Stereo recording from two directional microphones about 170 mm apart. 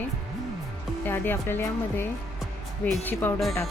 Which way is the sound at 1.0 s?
10° left (ahead or behind).